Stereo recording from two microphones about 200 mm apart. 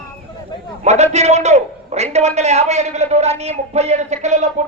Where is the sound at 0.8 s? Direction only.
35° right (ahead or behind).